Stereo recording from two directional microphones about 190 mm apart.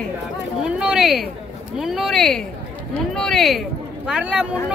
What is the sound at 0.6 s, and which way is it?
Speech, 5° right (ahead or behind).